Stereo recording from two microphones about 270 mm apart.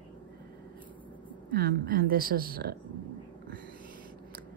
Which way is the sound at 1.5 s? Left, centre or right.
Right.